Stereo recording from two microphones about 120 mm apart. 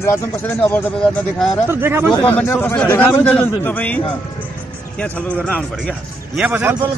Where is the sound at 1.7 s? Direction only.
20° right (ahead or behind).